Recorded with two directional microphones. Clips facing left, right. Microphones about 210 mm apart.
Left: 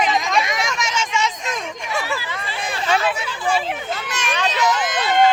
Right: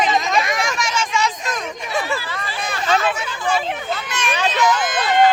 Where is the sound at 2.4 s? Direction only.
30° left (ahead or behind).